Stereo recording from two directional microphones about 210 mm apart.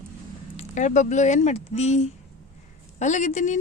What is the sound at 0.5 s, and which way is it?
Speech, 35° left (ahead or behind).